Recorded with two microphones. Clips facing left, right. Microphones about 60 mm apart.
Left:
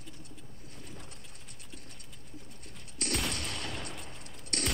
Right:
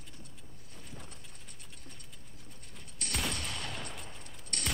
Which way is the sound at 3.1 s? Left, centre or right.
Centre.